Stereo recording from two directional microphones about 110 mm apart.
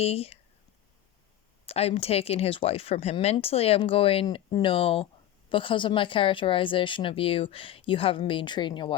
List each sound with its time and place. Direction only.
0.0 s speech: 65° left (ahead or behind)
1.6 s a woman's voice: 65° left (ahead or behind); by 9.0 s 45° left (ahead or behind)